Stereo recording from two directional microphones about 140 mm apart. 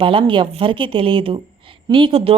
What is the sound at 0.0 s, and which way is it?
Speech, 35° right (ahead or behind).